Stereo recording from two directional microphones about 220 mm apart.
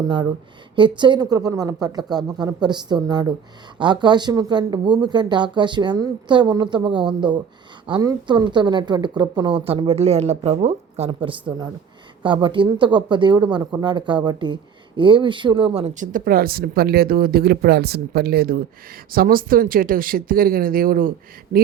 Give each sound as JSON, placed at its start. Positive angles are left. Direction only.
{"t": 0.8, "sound": "a woman's voice", "side_deg": -20}